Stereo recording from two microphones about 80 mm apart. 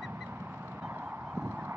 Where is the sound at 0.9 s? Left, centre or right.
Centre.